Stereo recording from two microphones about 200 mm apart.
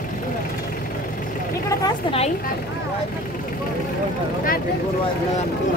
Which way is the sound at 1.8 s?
30° left (ahead or behind).